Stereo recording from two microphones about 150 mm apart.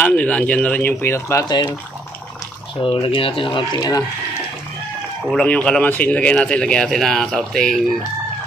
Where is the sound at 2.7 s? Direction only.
35° left (ahead or behind).